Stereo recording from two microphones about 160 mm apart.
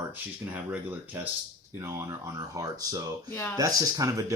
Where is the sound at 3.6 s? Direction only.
20° right (ahead or behind).